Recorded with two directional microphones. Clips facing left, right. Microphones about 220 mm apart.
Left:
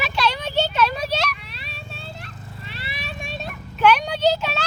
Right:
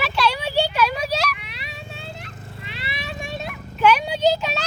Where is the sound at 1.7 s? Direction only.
20° right (ahead or behind).